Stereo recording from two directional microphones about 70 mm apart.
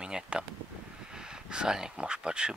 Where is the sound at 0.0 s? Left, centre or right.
Centre.